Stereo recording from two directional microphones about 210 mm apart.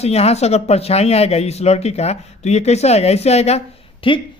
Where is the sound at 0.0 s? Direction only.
30° left (ahead or behind).